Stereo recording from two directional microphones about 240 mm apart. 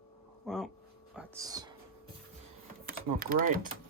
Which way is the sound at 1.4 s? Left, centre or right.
Centre.